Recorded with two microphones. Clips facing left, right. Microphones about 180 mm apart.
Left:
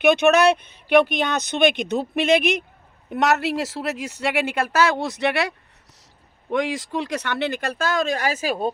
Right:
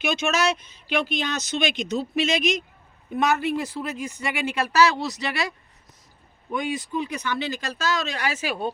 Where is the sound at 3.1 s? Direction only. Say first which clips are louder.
Left 2 dB; 75° left (ahead or behind).